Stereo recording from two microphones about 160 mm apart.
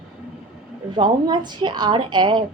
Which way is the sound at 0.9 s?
25° right (ahead or behind).